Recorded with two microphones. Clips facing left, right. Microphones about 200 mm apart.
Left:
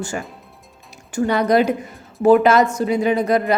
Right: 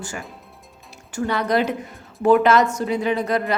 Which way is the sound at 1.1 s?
15° left (ahead or behind).